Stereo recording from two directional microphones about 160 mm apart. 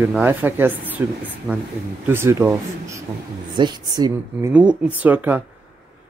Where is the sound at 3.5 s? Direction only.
25° right (ahead or behind).